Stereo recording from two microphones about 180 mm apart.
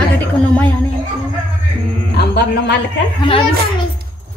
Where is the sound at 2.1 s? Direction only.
65° left (ahead or behind).